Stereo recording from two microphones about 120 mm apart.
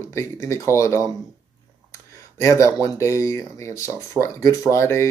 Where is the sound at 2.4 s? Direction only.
25° left (ahead or behind).